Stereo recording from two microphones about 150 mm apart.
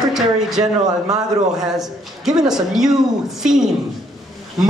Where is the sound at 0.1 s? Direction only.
5° right (ahead or behind).